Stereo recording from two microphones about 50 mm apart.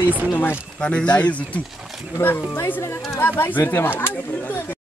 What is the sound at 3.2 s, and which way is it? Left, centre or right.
Speech, left.